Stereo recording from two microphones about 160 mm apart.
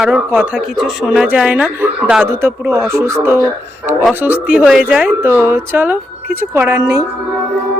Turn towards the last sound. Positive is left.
turn(degrees=-20)  # may be behind; listen again after turning